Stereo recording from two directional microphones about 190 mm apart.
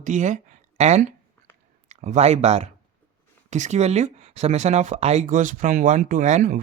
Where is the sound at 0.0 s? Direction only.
40° right (ahead or behind).